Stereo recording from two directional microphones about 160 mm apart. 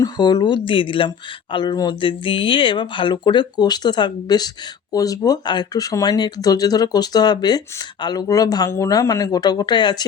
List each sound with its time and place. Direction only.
0.0 s speech: 25° left (ahead or behind)